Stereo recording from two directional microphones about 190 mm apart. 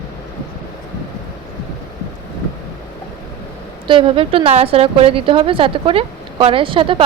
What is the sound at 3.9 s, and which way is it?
A woman's voice, 30° right (ahead or behind).